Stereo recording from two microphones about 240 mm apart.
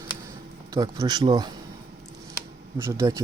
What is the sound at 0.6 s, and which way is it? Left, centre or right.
Speech, centre.